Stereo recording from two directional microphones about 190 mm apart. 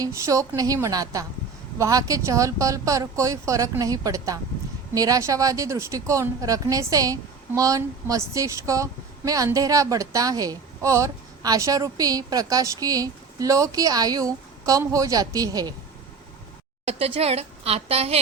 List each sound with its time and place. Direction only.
0.0 s speech: 15° right (ahead or behind)
16.8 s a woman's voice: 30° right (ahead or behind)